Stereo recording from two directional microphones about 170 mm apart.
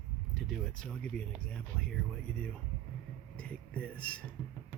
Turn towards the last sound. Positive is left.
turn(degrees=5)  # may be behind; listen again after turning